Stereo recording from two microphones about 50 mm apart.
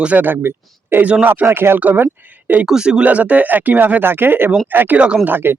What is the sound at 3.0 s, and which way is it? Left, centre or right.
Speech, right.